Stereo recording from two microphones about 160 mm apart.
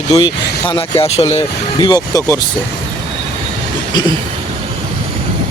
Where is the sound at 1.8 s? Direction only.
25° left (ahead or behind).